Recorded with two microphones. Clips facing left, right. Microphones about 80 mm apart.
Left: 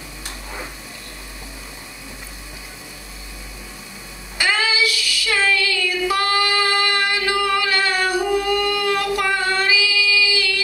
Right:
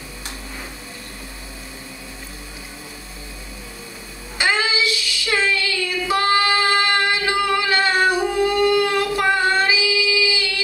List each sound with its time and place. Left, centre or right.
4.4 s child singing: right